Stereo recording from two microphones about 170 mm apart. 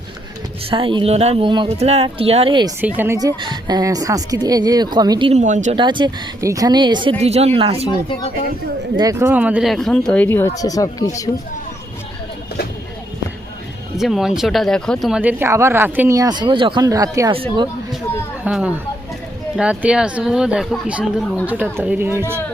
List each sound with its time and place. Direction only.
0.7 s speech: 30° right (ahead or behind)
2.8 s a woman's voice: 10° right (ahead or behind)
5.3 s speech: 45° right (ahead or behind)
5.7 s a woman's voice: 25° right (ahead or behind)
7.2 s speech: 40° right (ahead or behind)
7.9 s speech: 30° left (ahead or behind)
9.0 s speech: 20° right (ahead or behind); by 11.3 s 20° left (ahead or behind)
13.9 s speech: centre (ahead or behind); by 17.3 s 20° right (ahead or behind)
17.3 s speech: 30° right (ahead or behind)
18.4 s speech: 10° right (ahead or behind)
21.4 s speech: 10° right (ahead or behind)